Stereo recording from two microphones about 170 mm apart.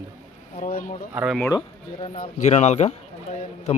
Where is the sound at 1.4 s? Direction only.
20° left (ahead or behind).